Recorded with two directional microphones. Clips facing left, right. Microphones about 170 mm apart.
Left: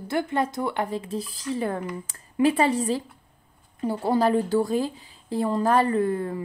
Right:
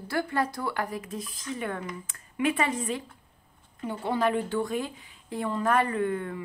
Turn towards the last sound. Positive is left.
turn(degrees=35)  # may be behind; listen again after turning